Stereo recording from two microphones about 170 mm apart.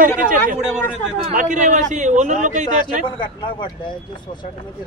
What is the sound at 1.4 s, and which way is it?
A man's voice, 45° right (ahead or behind).